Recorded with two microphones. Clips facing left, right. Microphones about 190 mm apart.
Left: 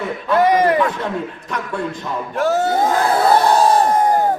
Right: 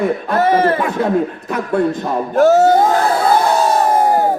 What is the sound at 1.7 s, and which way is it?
A man's voice, 45° right (ahead or behind).